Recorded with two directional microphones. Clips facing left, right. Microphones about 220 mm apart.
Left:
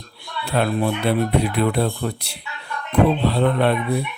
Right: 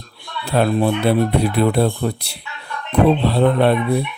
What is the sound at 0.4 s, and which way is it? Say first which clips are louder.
Speech: right 4 dB; 40° right (ahead or behind).